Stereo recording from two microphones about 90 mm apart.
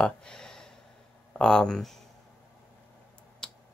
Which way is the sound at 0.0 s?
10° left (ahead or behind).